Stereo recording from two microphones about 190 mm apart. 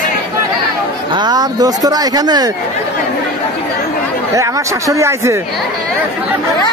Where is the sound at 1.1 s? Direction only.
20° right (ahead or behind).